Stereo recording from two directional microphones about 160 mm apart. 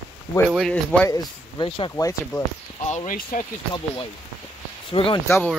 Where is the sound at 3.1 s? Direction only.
60° left (ahead or behind).